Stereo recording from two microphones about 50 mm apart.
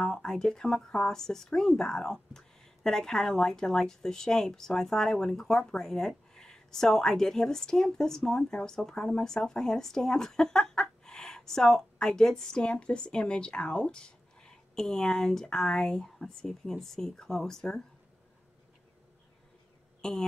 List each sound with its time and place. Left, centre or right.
0.0 s speech: centre
20.0 s speech: centre